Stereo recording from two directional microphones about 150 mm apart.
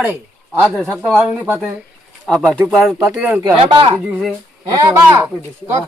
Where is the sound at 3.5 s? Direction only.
35° right (ahead or behind).